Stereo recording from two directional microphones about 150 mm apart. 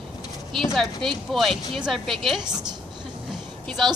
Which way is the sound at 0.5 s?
Centre (ahead or behind).